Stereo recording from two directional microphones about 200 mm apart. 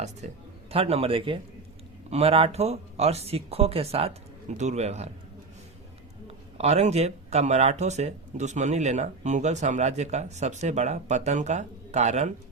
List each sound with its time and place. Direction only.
0.7 s a man's voice: 30° right (ahead or behind)
6.6 s speech: 35° right (ahead or behind)